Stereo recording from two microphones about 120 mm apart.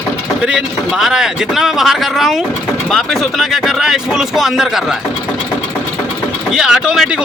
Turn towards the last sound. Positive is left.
turn(degrees=-5)  # may be behind; listen again after turning